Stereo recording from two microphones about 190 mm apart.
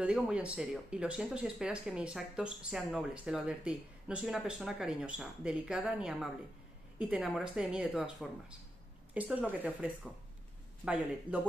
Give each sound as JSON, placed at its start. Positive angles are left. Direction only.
{"t": 0.0, "sound": "speech", "side_deg": -5}